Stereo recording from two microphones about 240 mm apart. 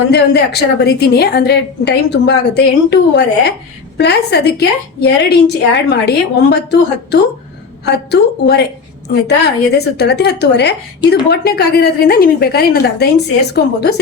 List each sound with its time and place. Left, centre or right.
0.1 s a woman's voice: left
9.7 s a woman's voice: left